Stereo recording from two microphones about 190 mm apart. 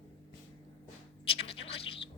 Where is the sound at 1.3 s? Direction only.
30° left (ahead or behind).